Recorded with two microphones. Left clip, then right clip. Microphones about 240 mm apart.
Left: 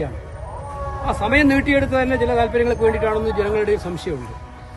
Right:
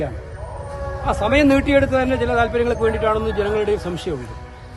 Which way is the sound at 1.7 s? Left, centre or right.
Right.